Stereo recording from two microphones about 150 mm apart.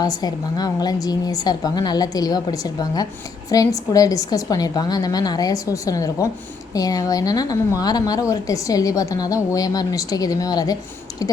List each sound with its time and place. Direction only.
0.0 s a woman's voice: 25° left (ahead or behind)